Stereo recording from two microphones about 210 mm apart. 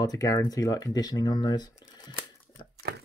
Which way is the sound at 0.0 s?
15° left (ahead or behind).